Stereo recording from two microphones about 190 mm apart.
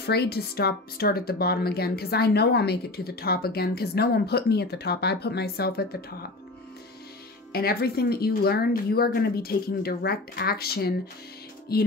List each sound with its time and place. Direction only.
0.0 s speech: 60° left (ahead or behind)
7.5 s speech: 55° left (ahead or behind)